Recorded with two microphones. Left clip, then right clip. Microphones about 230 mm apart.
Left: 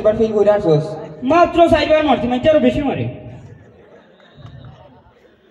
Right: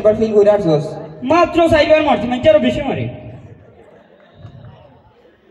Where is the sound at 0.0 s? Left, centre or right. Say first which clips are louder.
Right 2 dB; right.